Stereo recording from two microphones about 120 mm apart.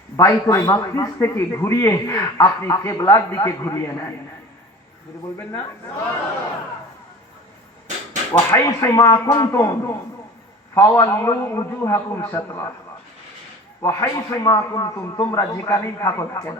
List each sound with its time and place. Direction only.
0.2 s a man's voice: 30° left (ahead or behind)
5.4 s a man's voice: 25° left (ahead or behind)
8.3 s a man's voice: 25° left (ahead or behind)
13.8 s a man's voice: 25° left (ahead or behind)